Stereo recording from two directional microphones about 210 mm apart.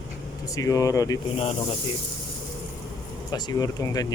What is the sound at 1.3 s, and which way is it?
Speech, 30° left (ahead or behind).